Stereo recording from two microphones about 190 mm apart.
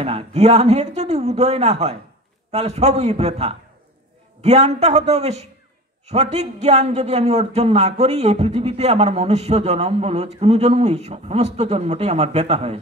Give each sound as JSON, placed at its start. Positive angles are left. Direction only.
{"t": 0.0, "sound": "a man's voice", "side_deg": -35}